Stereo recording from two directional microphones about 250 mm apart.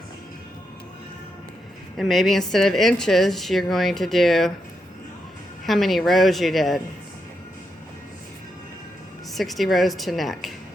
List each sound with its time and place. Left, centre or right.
2.0 s a woman's voice: centre
5.6 s a woman's voice: centre
9.3 s a woman's voice: centre